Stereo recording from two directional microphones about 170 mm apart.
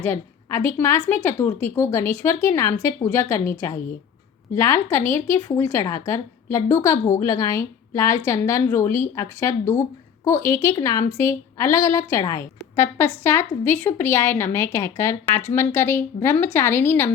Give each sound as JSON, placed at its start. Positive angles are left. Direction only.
{"t": 0.0, "sound": "a woman's voice", "side_deg": 15}